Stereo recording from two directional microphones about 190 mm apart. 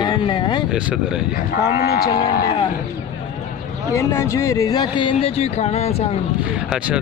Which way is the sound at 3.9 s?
15° left (ahead or behind).